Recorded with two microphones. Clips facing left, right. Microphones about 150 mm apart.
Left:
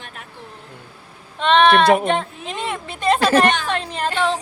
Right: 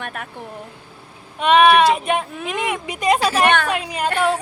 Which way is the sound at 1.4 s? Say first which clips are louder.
Right 1 dB; 10° right (ahead or behind).